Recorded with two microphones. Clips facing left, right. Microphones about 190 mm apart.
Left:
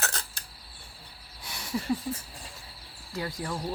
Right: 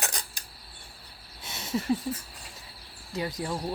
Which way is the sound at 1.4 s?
20° right (ahead or behind).